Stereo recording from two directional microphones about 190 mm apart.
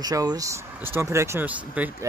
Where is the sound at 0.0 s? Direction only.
20° right (ahead or behind).